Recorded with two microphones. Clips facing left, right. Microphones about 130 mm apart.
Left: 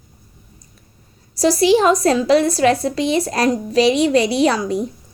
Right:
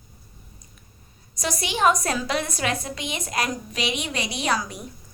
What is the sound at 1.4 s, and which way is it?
Speech, 30° left (ahead or behind).